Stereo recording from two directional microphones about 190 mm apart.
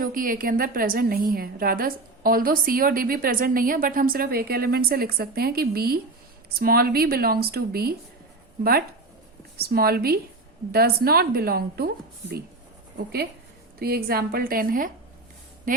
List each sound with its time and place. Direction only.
0.0 s a woman's voice: 45° right (ahead or behind)
9.6 s a woman's voice: 55° right (ahead or behind)
13.7 s a woman's voice: 55° right (ahead or behind)